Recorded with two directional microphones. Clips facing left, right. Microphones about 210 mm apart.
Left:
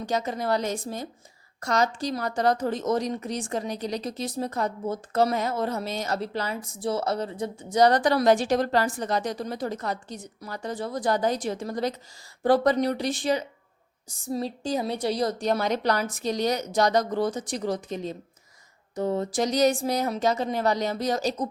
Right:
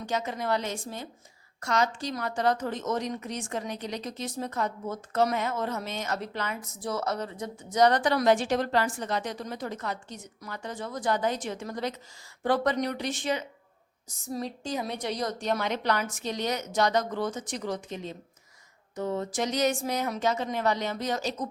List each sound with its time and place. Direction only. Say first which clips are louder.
0.0 s a woman's voice: left 3 dB; 35° left (ahead or behind)